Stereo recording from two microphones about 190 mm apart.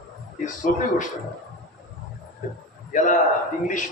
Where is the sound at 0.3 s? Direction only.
40° left (ahead or behind).